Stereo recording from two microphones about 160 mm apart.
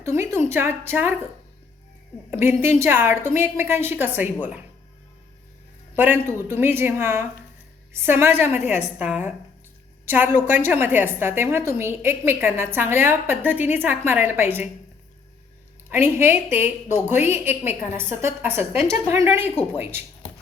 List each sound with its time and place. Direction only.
0.0 s a sound: 15° right (ahead or behind)
0.5 s a woman's voice: 15° right (ahead or behind)
2.3 s a woman's voice: 15° right (ahead or behind)
5.9 s a man's voice: 15° right (ahead or behind)
15.9 s a woman's voice: 15° right (ahead or behind)